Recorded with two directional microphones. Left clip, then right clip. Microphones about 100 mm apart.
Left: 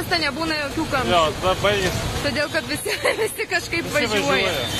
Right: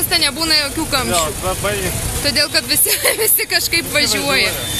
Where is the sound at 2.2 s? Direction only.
25° right (ahead or behind).